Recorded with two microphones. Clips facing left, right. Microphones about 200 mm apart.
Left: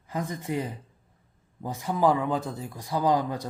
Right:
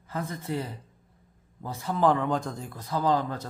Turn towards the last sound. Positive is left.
turn(degrees=15)  # may be behind; listen again after turning